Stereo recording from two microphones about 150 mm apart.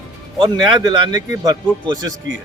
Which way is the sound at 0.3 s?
30° right (ahead or behind).